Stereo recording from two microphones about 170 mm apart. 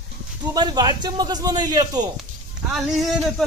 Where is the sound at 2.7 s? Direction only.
Centre (ahead or behind).